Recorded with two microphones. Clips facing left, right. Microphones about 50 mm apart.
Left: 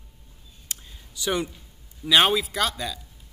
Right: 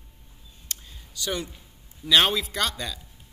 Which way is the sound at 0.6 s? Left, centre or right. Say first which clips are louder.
Even; centre.